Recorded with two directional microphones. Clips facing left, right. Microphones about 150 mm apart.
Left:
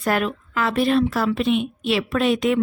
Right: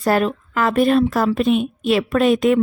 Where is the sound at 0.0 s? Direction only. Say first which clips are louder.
Right 4 dB; 35° right (ahead or behind).